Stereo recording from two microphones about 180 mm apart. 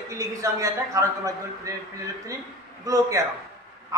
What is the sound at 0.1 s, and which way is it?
A man's voice, 15° right (ahead or behind).